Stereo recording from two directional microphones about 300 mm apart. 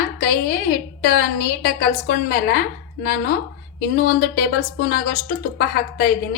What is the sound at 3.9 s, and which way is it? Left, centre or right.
A woman's voice, left.